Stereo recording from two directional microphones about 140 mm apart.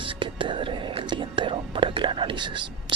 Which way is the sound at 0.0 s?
35° right (ahead or behind).